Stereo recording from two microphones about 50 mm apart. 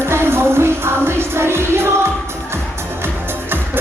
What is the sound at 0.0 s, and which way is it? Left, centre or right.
Music, right.